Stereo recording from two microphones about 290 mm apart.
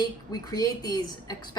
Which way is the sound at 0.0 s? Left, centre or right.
Centre.